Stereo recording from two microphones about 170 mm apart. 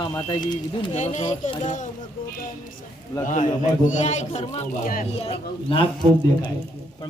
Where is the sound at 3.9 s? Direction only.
45° left (ahead or behind).